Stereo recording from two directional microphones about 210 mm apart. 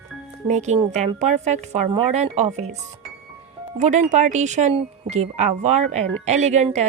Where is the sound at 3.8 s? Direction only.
35° right (ahead or behind).